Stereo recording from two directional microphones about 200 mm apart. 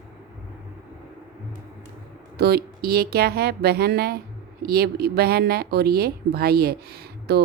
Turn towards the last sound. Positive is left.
turn(degrees=-55)  # may be behind; listen again after turning